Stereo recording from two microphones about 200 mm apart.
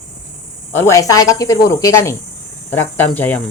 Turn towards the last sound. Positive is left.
turn(degrees=10)  # may be behind; listen again after turning